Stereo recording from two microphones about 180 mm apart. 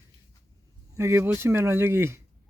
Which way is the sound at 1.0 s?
15° right (ahead or behind).